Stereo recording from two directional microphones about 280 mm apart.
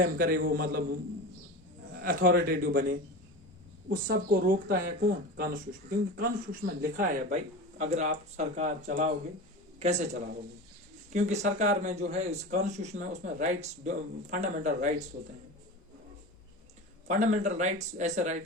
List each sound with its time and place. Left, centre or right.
0.0 s speech: right
2.0 s speech: right
4.0 s speech: right
17.1 s speech: right